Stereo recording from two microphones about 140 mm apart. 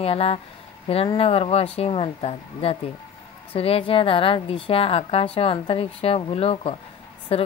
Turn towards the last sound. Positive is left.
turn(degrees=40)  # may be behind; listen again after turning